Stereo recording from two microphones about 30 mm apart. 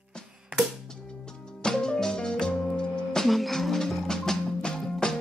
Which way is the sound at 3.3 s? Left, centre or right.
Centre.